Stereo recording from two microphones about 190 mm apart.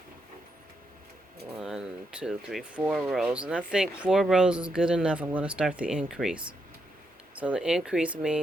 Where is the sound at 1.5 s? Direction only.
5° right (ahead or behind).